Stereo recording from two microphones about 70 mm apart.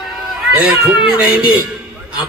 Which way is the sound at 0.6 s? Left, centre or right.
Centre.